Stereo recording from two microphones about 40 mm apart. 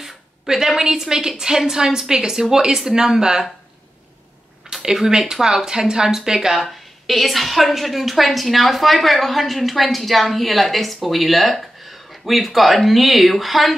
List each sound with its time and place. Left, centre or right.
0.0 s a woman's voice: centre
4.9 s speech: centre
6.6 s a woman's voice: centre